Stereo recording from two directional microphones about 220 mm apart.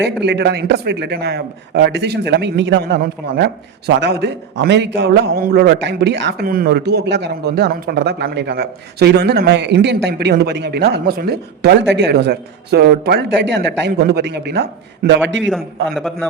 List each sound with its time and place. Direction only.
0.0 s a man's voice: 50° right (ahead or behind)
15.9 s a man's voice: centre (ahead or behind)